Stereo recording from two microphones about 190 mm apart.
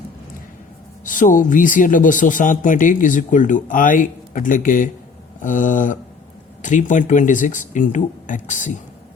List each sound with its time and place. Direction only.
1.0 s speech: 45° left (ahead or behind)